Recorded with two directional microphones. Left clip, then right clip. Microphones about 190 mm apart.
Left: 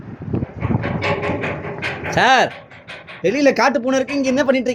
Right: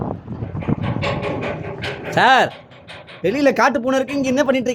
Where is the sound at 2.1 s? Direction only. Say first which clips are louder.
Right 1 dB; centre (ahead or behind).